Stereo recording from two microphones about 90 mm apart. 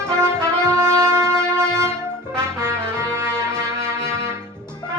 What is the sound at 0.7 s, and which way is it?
Music, 30° right (ahead or behind).